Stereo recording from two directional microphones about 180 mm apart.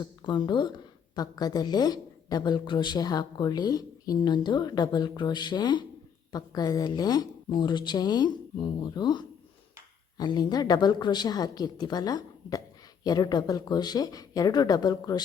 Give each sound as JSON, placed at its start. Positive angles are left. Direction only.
{"t": 0.0, "sound": "a woman's voice", "side_deg": 25}